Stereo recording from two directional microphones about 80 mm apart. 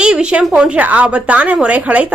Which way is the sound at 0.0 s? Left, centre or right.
Centre.